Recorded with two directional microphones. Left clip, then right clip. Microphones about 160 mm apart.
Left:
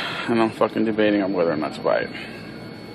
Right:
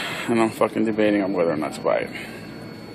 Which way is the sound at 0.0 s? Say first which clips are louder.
Even; centre (ahead or behind).